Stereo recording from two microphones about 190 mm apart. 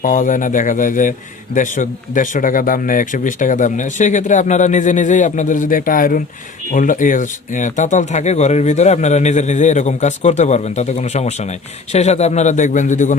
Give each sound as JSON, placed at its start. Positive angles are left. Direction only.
{"t": 0.0, "sound": "speech", "side_deg": 45}